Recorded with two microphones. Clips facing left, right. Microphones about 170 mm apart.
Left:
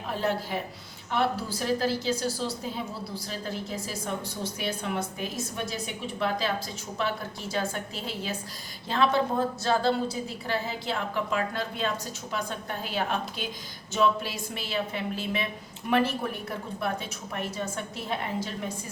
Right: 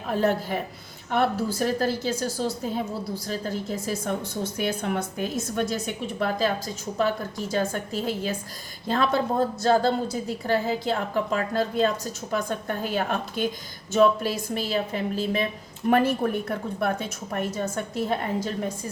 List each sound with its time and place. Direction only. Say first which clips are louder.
0.1 s a woman's voice: right 5 dB; 50° right (ahead or behind)